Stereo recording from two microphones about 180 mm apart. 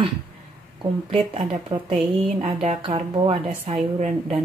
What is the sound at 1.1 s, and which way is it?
A woman's voice, 30° right (ahead or behind).